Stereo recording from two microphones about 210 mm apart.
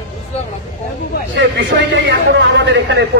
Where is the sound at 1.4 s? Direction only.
60° right (ahead or behind).